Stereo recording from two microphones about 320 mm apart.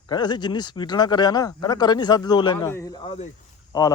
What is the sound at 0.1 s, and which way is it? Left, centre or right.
Speech, centre.